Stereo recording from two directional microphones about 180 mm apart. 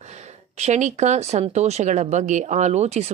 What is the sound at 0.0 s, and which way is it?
Speech, 40° right (ahead or behind).